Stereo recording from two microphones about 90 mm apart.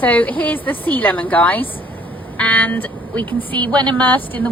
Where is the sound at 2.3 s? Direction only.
15° left (ahead or behind).